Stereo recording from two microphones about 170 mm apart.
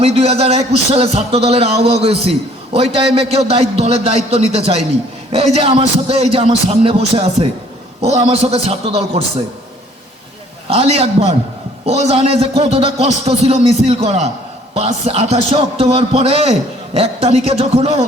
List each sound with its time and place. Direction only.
0.0 s a man's voice: 35° right (ahead or behind)
10.7 s a man's voice: 40° right (ahead or behind)